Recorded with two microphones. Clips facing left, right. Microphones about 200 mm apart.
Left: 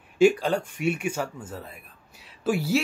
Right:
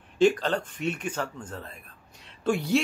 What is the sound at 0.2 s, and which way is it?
Speech, 10° left (ahead or behind).